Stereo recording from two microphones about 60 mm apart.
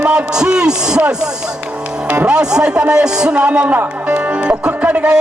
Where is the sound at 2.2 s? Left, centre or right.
Centre.